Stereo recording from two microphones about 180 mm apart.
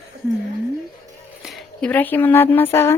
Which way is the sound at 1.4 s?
Centre (ahead or behind).